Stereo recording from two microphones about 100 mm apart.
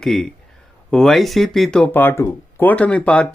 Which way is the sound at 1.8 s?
20° left (ahead or behind).